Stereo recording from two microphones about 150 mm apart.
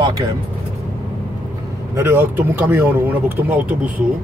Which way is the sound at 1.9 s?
15° right (ahead or behind).